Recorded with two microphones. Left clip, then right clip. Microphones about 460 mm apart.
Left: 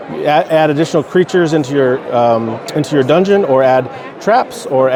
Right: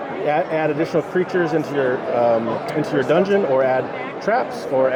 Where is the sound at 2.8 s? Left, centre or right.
Left.